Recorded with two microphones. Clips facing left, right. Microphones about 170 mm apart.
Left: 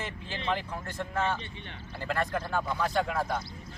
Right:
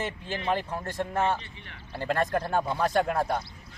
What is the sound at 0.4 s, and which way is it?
Speech, 40° right (ahead or behind).